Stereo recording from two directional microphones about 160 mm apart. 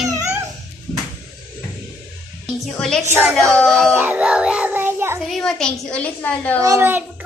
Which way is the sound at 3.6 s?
5° left (ahead or behind).